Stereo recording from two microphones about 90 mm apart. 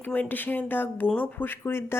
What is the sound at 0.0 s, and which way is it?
A woman's voice, 20° left (ahead or behind).